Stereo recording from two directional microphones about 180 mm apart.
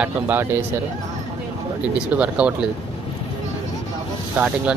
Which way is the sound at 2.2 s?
5° right (ahead or behind).